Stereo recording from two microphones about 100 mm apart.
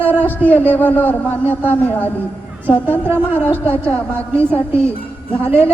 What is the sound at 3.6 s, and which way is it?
A man's voice, 15° left (ahead or behind).